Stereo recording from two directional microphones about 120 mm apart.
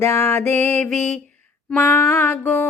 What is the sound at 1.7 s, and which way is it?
Mantra, 15° left (ahead or behind).